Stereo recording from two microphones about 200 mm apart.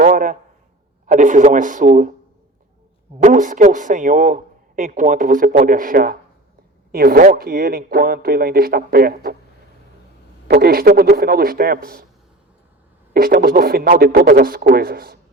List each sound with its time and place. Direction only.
0.0 s a sound: 45° right (ahead or behind)
1.0 s a man's voice: 40° right (ahead or behind)
3.2 s a man's voice: 40° right (ahead or behind)
10.5 s speech: 50° right (ahead or behind)
13.1 s speech: 45° right (ahead or behind)